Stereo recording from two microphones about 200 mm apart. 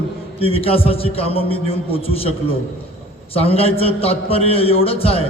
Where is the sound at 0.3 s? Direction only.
30° left (ahead or behind).